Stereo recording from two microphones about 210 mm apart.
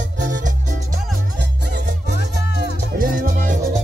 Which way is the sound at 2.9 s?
40° right (ahead or behind).